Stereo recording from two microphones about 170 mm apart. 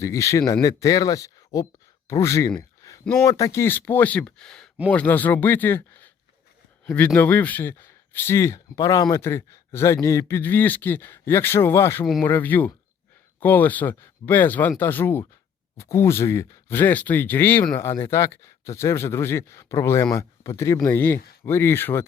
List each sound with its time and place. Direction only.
0.0 s speech: 20° left (ahead or behind)
2.6 s a sound: 20° left (ahead or behind)
3.0 s speech: 5° left (ahead or behind)
3.2 s speech: 20° left (ahead or behind)